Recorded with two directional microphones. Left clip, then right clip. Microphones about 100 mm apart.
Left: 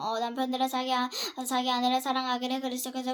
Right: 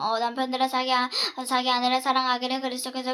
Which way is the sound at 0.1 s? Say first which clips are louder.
Right 5 dB; 45° left (ahead or behind).